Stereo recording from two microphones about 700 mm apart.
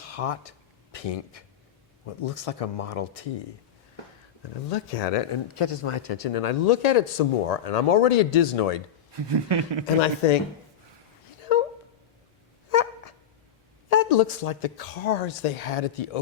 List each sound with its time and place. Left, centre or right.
0.0 s speech: left
4.7 s speech: left
9.1 s speech: right
9.8 s speech: left
12.7 s a sound: left
13.9 s speech: left